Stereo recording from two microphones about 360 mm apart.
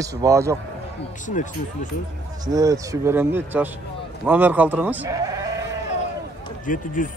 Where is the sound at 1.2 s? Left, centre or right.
Left.